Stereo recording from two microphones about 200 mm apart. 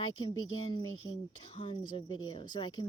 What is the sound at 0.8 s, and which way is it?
Speech, 80° left.